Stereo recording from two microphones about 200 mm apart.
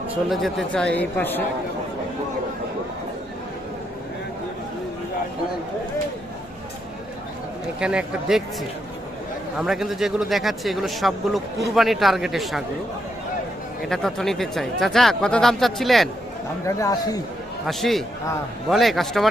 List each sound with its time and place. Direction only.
0.3 s speech: centre (ahead or behind)
7.8 s speech: 5° right (ahead or behind)
9.6 s speech: centre (ahead or behind)
13.8 s speech: centre (ahead or behind)
16.6 s a man's voice: 15° left (ahead or behind)
17.7 s speech: centre (ahead or behind)